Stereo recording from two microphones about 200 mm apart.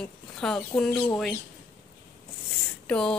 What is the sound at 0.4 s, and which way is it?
Speech, 5° left (ahead or behind).